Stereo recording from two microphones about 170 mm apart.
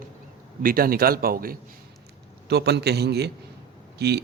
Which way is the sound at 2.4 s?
75° right (ahead or behind).